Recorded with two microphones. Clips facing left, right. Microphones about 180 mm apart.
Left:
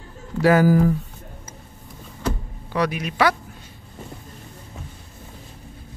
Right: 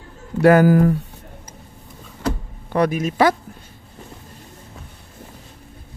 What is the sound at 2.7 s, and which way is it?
Speech, 50° right (ahead or behind).